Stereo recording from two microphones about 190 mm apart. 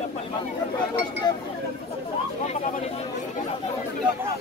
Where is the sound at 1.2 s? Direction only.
20° left (ahead or behind).